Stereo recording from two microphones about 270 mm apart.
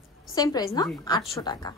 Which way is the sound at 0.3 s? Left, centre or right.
Centre.